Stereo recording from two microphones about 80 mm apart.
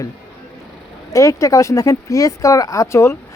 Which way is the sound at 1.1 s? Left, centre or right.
Left.